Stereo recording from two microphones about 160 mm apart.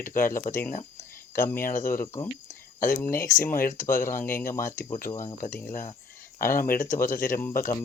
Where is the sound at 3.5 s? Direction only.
55° left (ahead or behind).